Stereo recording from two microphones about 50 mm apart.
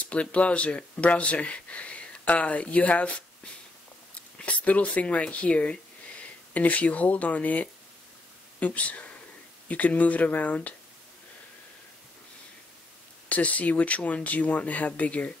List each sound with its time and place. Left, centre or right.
0.0 s speech: left
13.3 s speech: left